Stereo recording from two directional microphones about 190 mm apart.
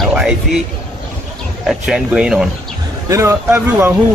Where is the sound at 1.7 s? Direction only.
Centre (ahead or behind).